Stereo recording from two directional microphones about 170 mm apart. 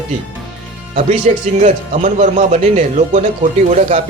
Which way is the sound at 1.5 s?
50° right (ahead or behind).